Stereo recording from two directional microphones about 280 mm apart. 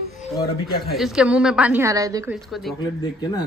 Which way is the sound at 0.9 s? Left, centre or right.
Centre.